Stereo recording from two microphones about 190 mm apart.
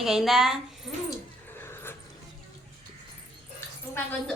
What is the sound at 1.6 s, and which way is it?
Neigh, 10° left (ahead or behind).